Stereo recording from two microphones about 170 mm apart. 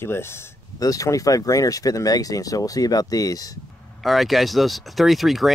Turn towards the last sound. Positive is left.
turn(degrees=0)  # may be behind; listen again after turning